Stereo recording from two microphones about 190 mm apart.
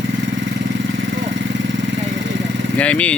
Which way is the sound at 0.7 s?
75° right (ahead or behind).